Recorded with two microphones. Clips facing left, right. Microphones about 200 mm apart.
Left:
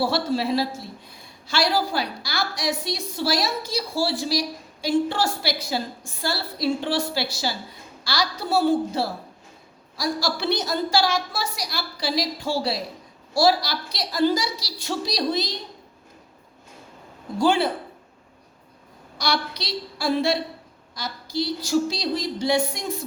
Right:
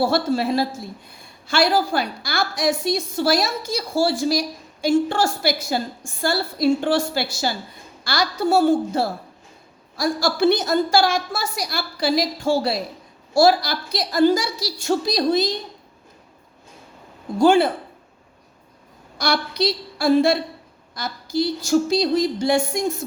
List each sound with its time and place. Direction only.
0.0 s a woman's voice: 50° right (ahead or behind)
17.4 s a woman's voice: 50° right (ahead or behind)
19.2 s a woman's voice: 50° right (ahead or behind)